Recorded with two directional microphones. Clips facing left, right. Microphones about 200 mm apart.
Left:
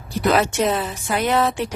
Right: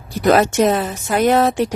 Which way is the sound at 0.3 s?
45° right (ahead or behind).